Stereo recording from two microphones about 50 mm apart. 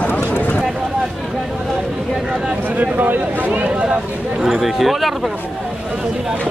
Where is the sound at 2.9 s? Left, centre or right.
Right.